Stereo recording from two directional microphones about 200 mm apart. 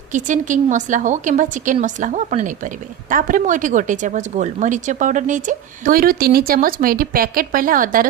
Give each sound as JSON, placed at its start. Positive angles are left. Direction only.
{"t": 0.1, "sound": "a woman's voice", "side_deg": -40}